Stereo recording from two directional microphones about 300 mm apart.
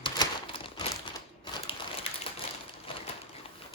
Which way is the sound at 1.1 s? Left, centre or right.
Centre.